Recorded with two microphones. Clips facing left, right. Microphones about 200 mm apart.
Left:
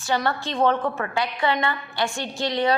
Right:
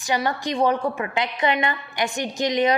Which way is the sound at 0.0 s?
15° right (ahead or behind).